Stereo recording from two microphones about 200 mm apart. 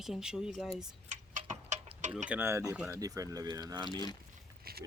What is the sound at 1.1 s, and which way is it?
Tick-tock, 40° right (ahead or behind).